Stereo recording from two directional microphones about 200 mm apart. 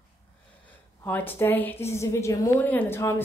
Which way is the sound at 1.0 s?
10° left (ahead or behind).